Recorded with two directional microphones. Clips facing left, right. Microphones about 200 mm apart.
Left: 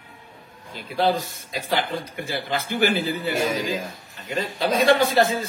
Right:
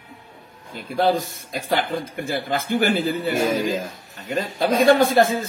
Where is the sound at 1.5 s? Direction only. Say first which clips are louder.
Right 2 dB; 50° right (ahead or behind).